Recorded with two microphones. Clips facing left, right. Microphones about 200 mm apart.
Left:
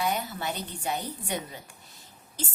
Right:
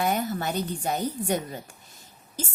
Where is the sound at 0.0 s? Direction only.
50° right (ahead or behind).